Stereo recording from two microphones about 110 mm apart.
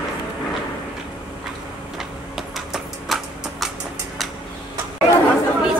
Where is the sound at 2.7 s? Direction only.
Centre (ahead or behind).